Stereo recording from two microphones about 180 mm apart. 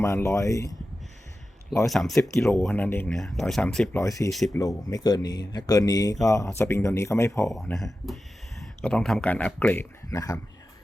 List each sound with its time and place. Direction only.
0.0 s speech: 15° left (ahead or behind)
1.9 s speech: centre (ahead or behind)
4.0 s speech: 15° left (ahead or behind)
4.3 s speech: centre (ahead or behind)
4.5 s speech: 20° left (ahead or behind)
7.5 s speech: centre (ahead or behind); by 10.4 s 15° left (ahead or behind)